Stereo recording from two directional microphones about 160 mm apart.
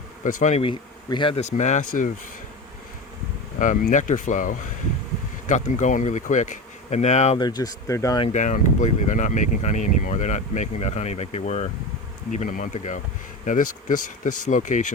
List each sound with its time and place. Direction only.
0.3 s speech: 50° left (ahead or behind)
0.6 s speech: 30° left (ahead or behind); by 2.0 s 50° left (ahead or behind)
3.6 s speech: 55° left (ahead or behind)
7.3 s speech: 25° left (ahead or behind)
8.3 s speech: 50° left (ahead or behind)